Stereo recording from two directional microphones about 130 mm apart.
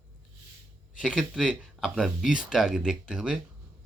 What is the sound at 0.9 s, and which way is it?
Speech, 5° right (ahead or behind).